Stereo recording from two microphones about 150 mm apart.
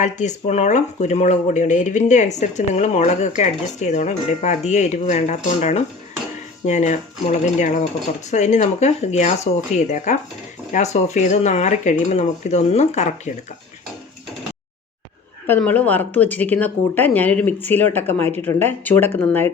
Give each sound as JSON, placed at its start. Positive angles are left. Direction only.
{"t": 0.0, "sound": "speech", "side_deg": 55}
{"t": 15.4, "sound": "speech", "side_deg": 10}